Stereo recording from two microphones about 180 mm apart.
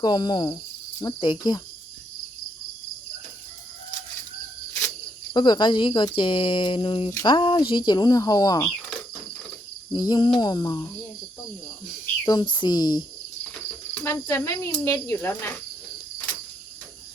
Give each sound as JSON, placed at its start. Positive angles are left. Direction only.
{"t": 0.0, "sound": "speech", "side_deg": 25}
{"t": 5.3, "sound": "speech", "side_deg": 25}
{"t": 9.9, "sound": "speech", "side_deg": 25}
{"t": 12.2, "sound": "speech", "side_deg": 20}